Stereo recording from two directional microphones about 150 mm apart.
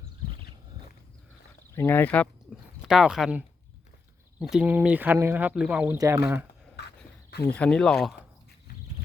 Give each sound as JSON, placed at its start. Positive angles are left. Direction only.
{"t": 1.7, "sound": "speech", "side_deg": 15}
{"t": 2.5, "sound": "a sound", "side_deg": -5}
{"t": 2.8, "sound": "speech", "side_deg": -5}
{"t": 7.3, "sound": "cricket", "side_deg": 90}
{"t": 7.5, "sound": "speech", "side_deg": 5}